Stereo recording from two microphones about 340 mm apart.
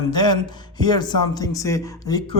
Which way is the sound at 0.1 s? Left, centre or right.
Centre.